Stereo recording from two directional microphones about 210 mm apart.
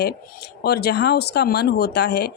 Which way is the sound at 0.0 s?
50° left (ahead or behind).